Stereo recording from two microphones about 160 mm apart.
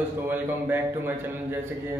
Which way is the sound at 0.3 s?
10° right (ahead or behind).